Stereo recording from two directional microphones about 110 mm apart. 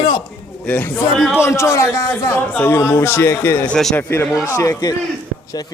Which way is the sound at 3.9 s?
20° left (ahead or behind).